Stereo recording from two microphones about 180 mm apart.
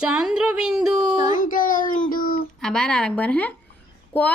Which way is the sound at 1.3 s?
50° left (ahead or behind).